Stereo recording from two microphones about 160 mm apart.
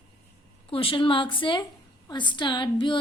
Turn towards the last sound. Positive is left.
turn(degrees=30)  # may be behind; listen again after turning